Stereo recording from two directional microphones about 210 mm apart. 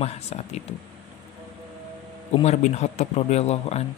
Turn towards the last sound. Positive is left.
turn(degrees=30)  # may be behind; listen again after turning